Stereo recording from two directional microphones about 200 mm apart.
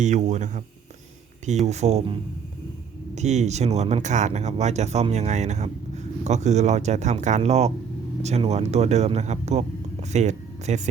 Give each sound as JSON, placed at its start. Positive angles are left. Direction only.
{"t": 0.0, "sound": "speech", "side_deg": -35}
{"t": 3.2, "sound": "speech", "side_deg": -35}